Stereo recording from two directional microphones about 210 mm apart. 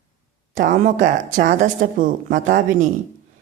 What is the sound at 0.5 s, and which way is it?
Speech, 40° right (ahead or behind).